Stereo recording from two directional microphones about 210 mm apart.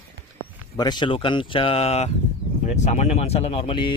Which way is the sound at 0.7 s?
20° left (ahead or behind).